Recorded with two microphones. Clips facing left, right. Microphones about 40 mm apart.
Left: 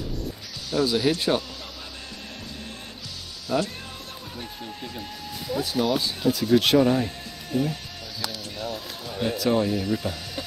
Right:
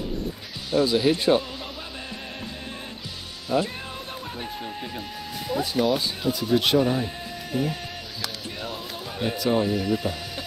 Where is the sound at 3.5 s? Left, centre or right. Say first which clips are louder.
Right 1 dB; centre.